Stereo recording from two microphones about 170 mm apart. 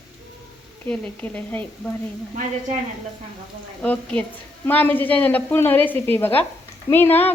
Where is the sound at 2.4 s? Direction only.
45° right (ahead or behind).